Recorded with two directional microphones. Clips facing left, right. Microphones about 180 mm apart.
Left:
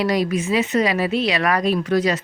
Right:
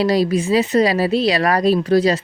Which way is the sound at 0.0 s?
30° right (ahead or behind).